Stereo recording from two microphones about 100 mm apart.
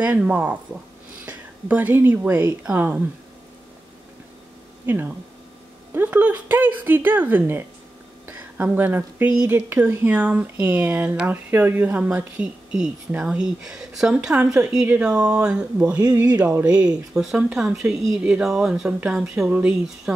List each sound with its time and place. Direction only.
0.0 s speech: 15° right (ahead or behind)
1.2 s whispering: 15° right (ahead or behind)
2.1 s speech: 20° right (ahead or behind)
4.8 s speech: 20° right (ahead or behind)